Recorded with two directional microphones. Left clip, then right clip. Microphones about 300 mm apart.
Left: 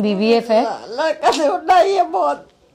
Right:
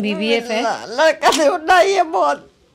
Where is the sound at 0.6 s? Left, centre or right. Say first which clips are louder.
Right 4 dB; right.